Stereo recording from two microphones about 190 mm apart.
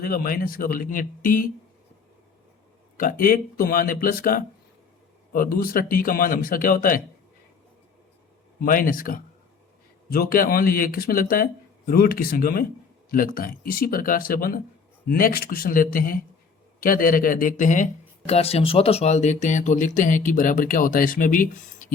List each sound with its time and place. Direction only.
0.0 s speech: 50° left (ahead or behind)
3.0 s speech: 50° left (ahead or behind)
8.6 s speech: 45° left (ahead or behind)